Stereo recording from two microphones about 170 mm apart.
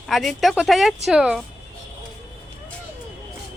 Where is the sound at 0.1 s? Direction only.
Centre (ahead or behind).